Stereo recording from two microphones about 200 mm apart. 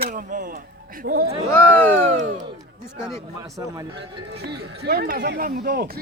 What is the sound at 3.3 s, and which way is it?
Speech, 15° right (ahead or behind).